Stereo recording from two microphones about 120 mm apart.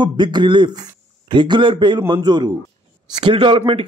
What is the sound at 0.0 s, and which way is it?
A man's voice, 40° right (ahead or behind).